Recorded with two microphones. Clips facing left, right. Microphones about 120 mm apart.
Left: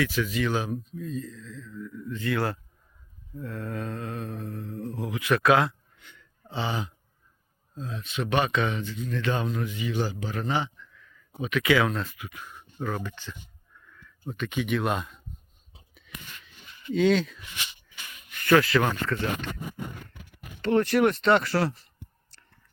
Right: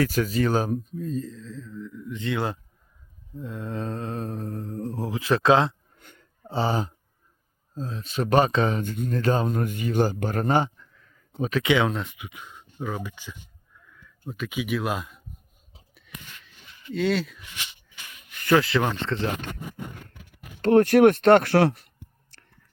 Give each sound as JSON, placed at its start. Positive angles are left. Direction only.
{"t": 0.0, "sound": "speech", "side_deg": -40}
{"t": 1.9, "sound": "speech", "side_deg": -15}
{"t": 3.8, "sound": "speech", "side_deg": -30}
{"t": 6.0, "sound": "a sound", "side_deg": -45}
{"t": 7.8, "sound": "speech", "side_deg": -35}
{"t": 8.8, "sound": "speech", "side_deg": -50}
{"t": 11.6, "sound": "speech", "side_deg": -25}
{"t": 16.0, "sound": "whispering", "side_deg": 0}
{"t": 16.9, "sound": "speech", "side_deg": 0}
{"t": 18.4, "sound": "speech", "side_deg": -20}
{"t": 20.6, "sound": "speech", "side_deg": -50}